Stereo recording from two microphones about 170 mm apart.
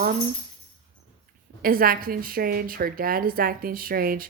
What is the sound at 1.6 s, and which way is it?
A woman's voice, 60° right (ahead or behind).